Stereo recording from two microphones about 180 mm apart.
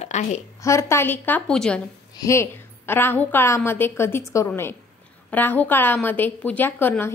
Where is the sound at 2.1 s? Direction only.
15° left (ahead or behind).